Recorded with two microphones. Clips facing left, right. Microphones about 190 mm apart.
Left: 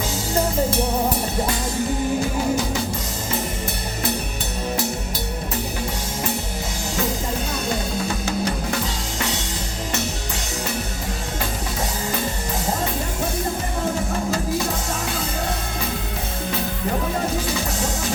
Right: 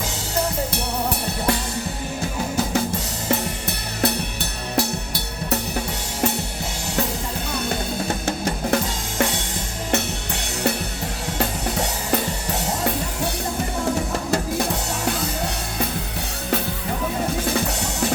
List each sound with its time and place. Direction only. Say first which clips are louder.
4.8 s music: right 2 dB; 70° right (ahead or behind)
8.7 s drum kit: right 3 dB; 50° right (ahead or behind)